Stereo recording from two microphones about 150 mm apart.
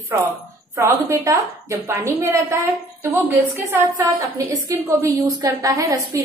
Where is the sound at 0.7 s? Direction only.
25° right (ahead or behind).